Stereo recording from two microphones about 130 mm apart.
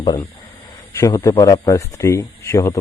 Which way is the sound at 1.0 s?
20° left (ahead or behind).